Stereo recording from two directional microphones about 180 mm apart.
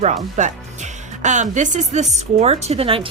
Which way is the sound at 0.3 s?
40° right (ahead or behind).